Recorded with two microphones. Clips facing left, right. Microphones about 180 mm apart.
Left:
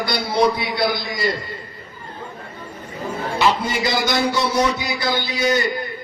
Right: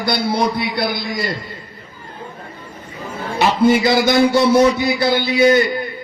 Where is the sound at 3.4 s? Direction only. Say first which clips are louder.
Right 7 dB; 55° right (ahead or behind).